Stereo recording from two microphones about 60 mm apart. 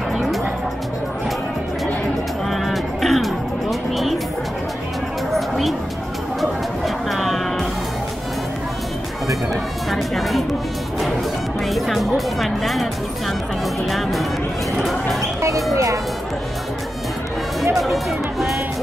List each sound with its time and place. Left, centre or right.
2.5 s music: centre
5.3 s a sound: centre
7.1 s music: centre
9.5 s a sound: centre
11.6 s music: centre
13.8 s music: centre
14.8 s a sound: centre
15.7 s music: right
17.7 s music: centre